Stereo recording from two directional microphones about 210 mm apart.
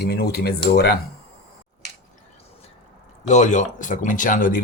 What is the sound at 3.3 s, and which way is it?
Speech, 35° left (ahead or behind).